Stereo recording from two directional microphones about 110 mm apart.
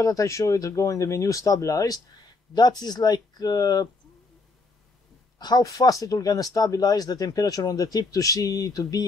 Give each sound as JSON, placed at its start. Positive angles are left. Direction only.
{"t": 0.0, "sound": "speech", "side_deg": 30}
{"t": 5.4, "sound": "speech", "side_deg": 35}